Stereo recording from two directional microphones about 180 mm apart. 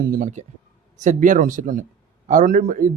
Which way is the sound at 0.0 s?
50° right (ahead or behind).